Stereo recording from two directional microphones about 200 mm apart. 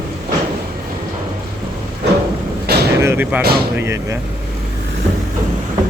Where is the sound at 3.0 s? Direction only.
10° right (ahead or behind).